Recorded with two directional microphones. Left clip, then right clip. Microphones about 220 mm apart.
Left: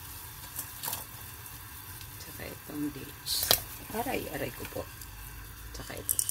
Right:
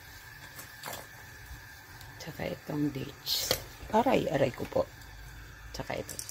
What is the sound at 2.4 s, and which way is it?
Speech, 20° right (ahead or behind).